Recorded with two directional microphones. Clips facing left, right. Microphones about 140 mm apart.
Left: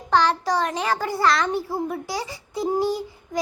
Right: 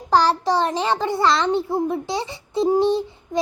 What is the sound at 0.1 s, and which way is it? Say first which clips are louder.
A child's voice: right 3 dB; 35° right (ahead or behind).